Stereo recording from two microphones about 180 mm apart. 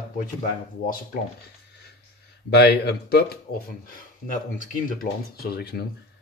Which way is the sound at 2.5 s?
65° left (ahead or behind).